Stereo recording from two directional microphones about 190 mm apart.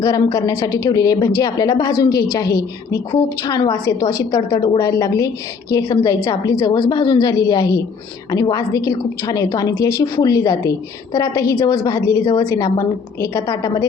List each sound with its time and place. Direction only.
0.0 s a woman's voice: 20° left (ahead or behind)